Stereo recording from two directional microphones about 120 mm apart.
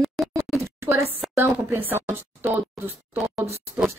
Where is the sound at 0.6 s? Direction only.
20° right (ahead or behind).